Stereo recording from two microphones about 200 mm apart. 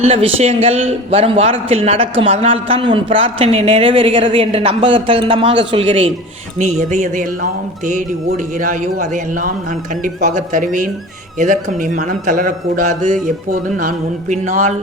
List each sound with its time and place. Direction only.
0.0 s a man's voice: 30° right (ahead or behind)
8.3 s a man's voice: 40° right (ahead or behind)